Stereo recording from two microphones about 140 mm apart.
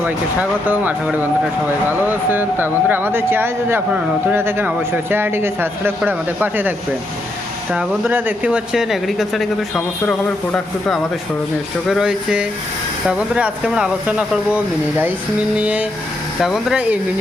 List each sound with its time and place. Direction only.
0.7 s speech: 10° right (ahead or behind)